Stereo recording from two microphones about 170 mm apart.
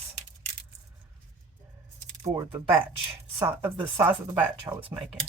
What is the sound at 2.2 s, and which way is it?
Speech, 20° right (ahead or behind).